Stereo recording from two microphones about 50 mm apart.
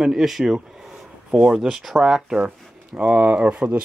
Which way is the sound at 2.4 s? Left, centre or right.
Right.